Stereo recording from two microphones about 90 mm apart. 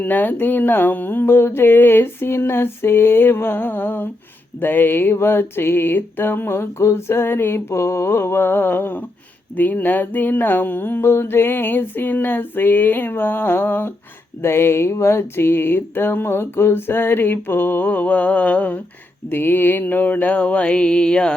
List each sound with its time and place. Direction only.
0.0 s mantra: 20° left (ahead or behind)